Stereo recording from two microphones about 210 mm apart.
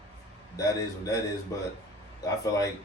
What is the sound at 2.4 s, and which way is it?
Speech, 15° left (ahead or behind).